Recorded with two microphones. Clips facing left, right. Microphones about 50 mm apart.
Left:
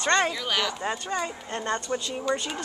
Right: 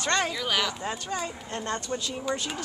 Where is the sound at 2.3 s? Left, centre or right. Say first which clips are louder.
Left 3 dB; centre.